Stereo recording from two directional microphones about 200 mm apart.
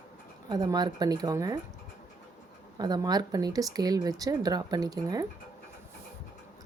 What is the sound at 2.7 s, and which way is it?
Speech, 20° right (ahead or behind).